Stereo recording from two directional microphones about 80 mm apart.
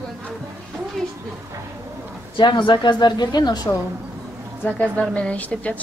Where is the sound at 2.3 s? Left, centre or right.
Left.